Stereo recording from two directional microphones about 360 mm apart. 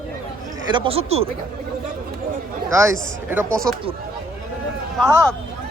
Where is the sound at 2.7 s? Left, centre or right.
Centre.